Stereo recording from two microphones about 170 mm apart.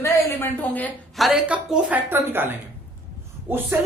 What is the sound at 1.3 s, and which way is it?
A woman's voice, 5° right (ahead or behind).